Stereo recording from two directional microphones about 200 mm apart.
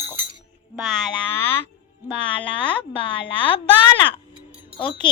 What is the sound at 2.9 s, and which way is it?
A woman's voice, 25° left (ahead or behind).